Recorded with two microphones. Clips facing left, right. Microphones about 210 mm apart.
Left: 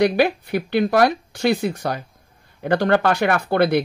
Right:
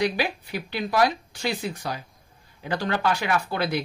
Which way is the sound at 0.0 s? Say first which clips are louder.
Left 8 dB; 60° left (ahead or behind).